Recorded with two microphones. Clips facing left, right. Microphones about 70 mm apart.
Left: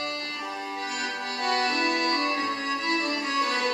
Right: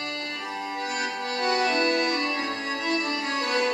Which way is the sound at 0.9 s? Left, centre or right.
Centre.